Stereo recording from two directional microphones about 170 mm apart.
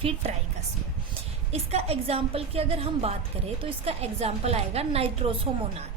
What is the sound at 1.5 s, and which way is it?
A woman's voice, 35° right (ahead or behind).